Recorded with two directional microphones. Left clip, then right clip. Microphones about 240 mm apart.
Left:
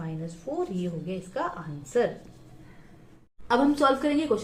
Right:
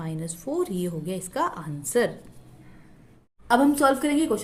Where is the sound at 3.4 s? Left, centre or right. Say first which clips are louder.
Right 2 dB; right.